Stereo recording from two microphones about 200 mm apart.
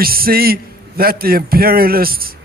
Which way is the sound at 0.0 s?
50° right (ahead or behind).